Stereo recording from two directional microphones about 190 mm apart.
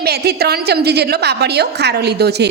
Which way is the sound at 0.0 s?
55° right (ahead or behind).